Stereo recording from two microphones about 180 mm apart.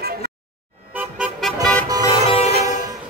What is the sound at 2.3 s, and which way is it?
Music, 35° left (ahead or behind).